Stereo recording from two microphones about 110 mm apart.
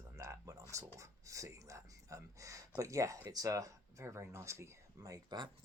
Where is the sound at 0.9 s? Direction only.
30° right (ahead or behind).